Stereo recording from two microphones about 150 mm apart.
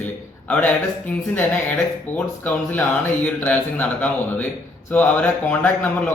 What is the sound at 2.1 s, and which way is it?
A man's voice, 10° left (ahead or behind).